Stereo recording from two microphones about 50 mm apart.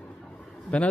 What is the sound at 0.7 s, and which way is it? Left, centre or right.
Speech, left.